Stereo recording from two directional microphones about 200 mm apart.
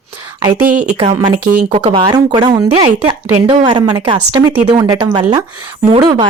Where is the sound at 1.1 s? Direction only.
10° right (ahead or behind).